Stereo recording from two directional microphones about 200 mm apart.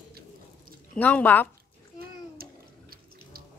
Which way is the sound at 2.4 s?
45° right (ahead or behind).